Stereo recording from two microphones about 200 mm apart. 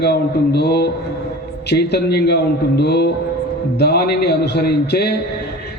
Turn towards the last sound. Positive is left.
turn(degrees=55)  # may be behind; listen again after turning